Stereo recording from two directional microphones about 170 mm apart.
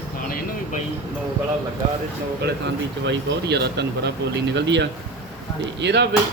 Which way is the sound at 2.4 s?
75° right (ahead or behind).